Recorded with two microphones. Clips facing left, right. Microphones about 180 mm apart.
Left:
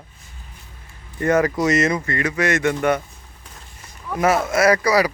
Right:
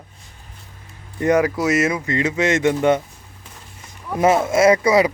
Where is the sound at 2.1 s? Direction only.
20° right (ahead or behind).